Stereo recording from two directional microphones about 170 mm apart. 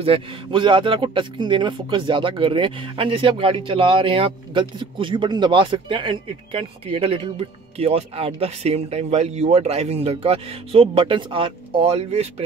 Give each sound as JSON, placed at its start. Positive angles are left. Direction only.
{"t": 0.0, "sound": "speech", "side_deg": -30}